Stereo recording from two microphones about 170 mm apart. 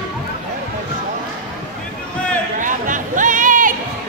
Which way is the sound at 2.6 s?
50° right (ahead or behind).